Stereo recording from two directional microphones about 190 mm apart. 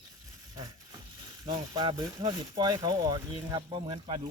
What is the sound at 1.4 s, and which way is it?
Speech, 20° right (ahead or behind).